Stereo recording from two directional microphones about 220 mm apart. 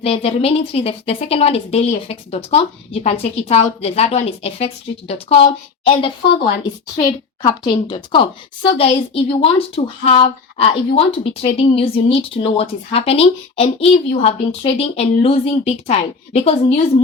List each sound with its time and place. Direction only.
0.0 s speech: 25° left (ahead or behind)